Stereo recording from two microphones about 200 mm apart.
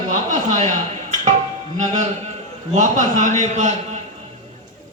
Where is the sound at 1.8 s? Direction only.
35° right (ahead or behind).